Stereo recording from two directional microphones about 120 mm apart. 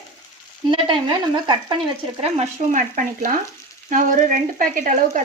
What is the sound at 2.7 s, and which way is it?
Speech, 90° right.